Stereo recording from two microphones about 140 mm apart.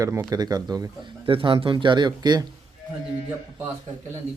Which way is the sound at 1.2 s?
40° right (ahead or behind).